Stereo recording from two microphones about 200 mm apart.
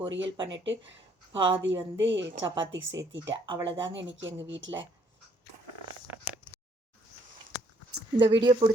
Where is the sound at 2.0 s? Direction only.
65° right (ahead or behind).